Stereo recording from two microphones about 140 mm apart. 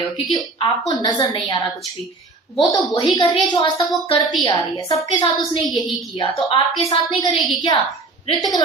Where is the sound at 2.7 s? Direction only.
30° left (ahead or behind).